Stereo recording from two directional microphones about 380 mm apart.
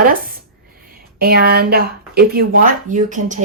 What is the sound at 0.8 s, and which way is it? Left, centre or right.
Speech, right.